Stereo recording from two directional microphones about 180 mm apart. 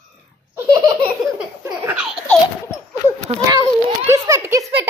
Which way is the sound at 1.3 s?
15° right (ahead or behind).